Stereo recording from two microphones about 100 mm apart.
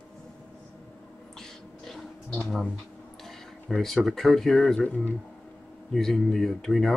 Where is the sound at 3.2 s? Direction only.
5° left (ahead or behind).